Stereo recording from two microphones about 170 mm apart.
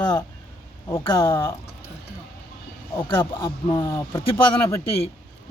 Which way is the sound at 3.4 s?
20° left (ahead or behind).